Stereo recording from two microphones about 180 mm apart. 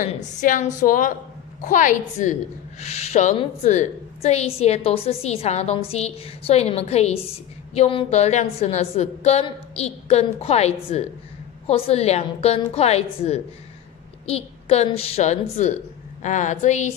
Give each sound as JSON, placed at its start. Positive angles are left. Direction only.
{"t": 0.0, "sound": "a woman's voice", "side_deg": 45}